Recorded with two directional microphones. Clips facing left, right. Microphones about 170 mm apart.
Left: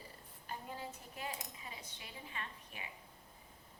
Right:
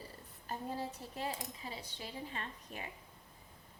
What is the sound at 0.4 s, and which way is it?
Speech, 35° right (ahead or behind).